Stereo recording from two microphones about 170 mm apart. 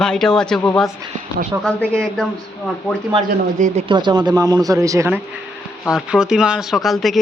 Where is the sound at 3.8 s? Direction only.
30° right (ahead or behind).